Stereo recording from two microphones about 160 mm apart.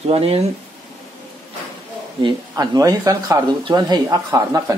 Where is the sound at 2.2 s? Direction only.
25° right (ahead or behind).